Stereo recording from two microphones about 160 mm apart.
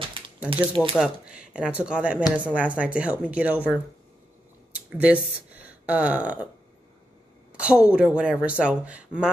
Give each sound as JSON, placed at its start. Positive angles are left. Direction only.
{"t": 0.5, "sound": "speech", "side_deg": -35}
{"t": 0.9, "sound": "speech", "side_deg": -5}
{"t": 5.0, "sound": "speech", "side_deg": -10}
{"t": 7.5, "sound": "speech", "side_deg": -5}